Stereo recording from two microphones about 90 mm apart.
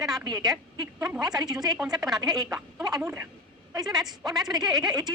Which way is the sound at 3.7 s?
45° right (ahead or behind).